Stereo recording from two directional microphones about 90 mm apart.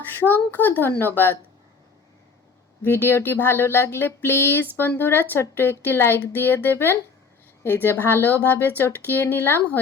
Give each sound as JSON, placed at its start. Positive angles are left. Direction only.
{"t": 0.0, "sound": "speech", "side_deg": 20}
{"t": 2.8, "sound": "speech", "side_deg": 25}